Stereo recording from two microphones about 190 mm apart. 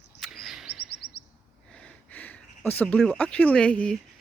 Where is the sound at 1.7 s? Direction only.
5° left (ahead or behind).